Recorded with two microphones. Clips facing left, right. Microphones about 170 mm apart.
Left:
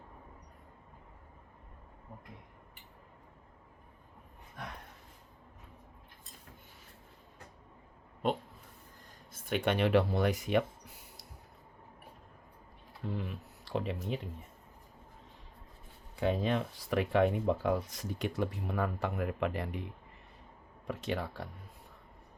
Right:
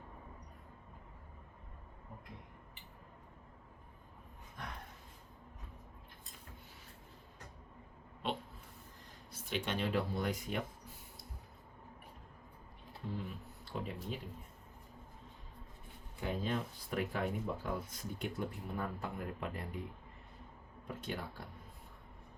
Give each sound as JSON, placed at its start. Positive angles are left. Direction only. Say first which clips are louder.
{"t": 9.3, "sound": "speech", "louder": "left 7 dB", "side_deg": 55}
{"t": 13.1, "sound": "a sound", "louder": "left 3 dB", "side_deg": 80}
{"t": 16.2, "sound": "speech", "louder": "left 7 dB", "side_deg": 80}
{"t": 20.8, "sound": "speech", "louder": "left 7 dB", "side_deg": 80}